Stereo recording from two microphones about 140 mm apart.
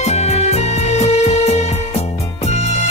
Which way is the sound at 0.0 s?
50° left (ahead or behind).